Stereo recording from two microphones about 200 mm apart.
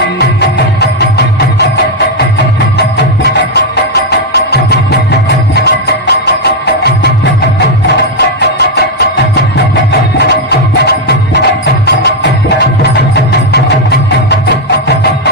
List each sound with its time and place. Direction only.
4.5 s music: 55° left (ahead or behind)
8.4 s music: 55° left (ahead or behind)
11.6 s music: 60° left (ahead or behind)
13.5 s music: 55° left (ahead or behind)